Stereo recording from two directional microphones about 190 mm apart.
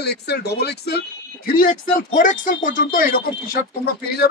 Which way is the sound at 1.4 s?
50° left (ahead or behind).